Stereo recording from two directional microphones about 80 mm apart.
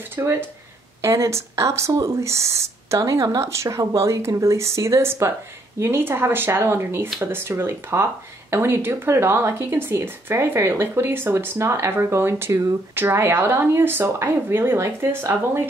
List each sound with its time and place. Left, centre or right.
0.1 s speech: right